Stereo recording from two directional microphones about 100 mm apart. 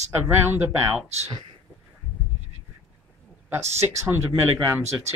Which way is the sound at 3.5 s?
25° right (ahead or behind).